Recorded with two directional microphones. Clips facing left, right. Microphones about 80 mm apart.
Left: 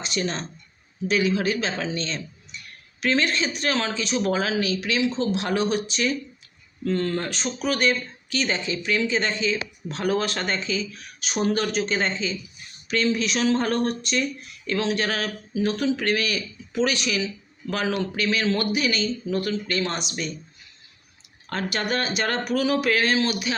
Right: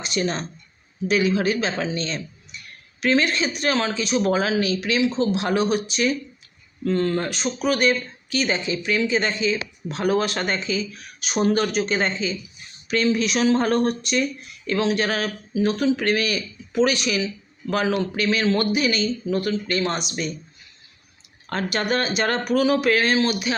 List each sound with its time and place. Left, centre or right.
0.0 s speech: centre
1.3 s speech: right; by 4.2 s centre
4.6 s speech: right
5.3 s speech: centre
11.3 s speech: right
11.9 s speech: centre
17.9 s speech: right
21.5 s speech: right